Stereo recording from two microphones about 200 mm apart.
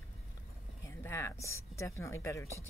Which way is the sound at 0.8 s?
15° left (ahead or behind).